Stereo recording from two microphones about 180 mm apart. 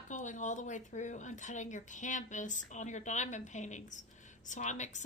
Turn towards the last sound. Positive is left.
turn(degrees=40)  # may be behind; listen again after turning